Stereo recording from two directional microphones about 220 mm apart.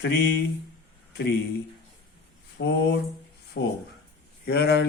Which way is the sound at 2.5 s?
55° left (ahead or behind).